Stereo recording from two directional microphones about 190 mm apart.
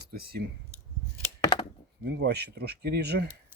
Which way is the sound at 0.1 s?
55° right (ahead or behind).